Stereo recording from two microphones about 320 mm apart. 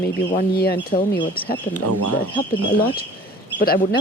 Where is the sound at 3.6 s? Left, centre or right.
Left.